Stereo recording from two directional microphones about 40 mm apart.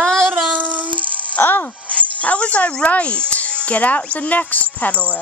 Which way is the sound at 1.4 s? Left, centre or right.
Left.